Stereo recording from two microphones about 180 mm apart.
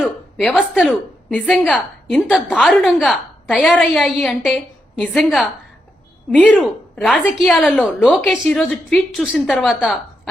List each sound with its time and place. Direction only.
0.0 s a woman's voice: 5° right (ahead or behind)